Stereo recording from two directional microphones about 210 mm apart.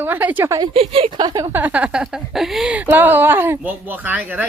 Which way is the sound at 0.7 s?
25° right (ahead or behind).